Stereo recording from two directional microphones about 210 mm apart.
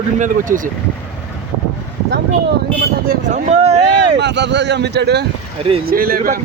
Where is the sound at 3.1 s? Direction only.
35° right (ahead or behind).